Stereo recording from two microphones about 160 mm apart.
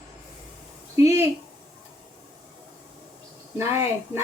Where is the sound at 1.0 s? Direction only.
20° right (ahead or behind).